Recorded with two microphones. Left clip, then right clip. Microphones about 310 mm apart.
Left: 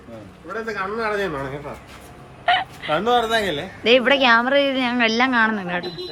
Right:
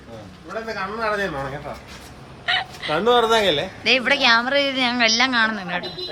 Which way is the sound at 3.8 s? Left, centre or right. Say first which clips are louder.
Left 2 dB; centre.